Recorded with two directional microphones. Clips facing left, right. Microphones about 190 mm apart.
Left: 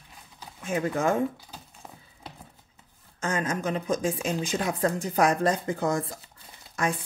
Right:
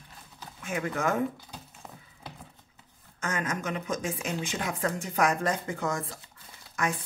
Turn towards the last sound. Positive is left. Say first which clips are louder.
# left 3 dB
turn(degrees=30)  # may be behind; listen again after turning